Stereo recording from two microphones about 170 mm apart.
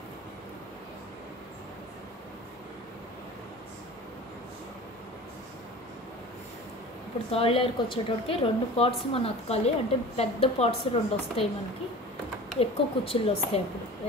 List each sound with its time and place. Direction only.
7.2 s a woman's voice: 35° left (ahead or behind)
12.5 s a woman's voice: 35° left (ahead or behind)